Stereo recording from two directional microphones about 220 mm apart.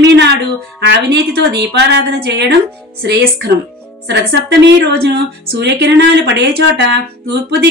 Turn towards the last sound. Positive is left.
turn(degrees=-45)  # may be behind; listen again after turning